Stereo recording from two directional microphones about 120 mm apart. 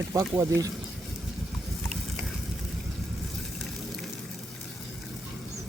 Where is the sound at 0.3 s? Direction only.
30° right (ahead or behind).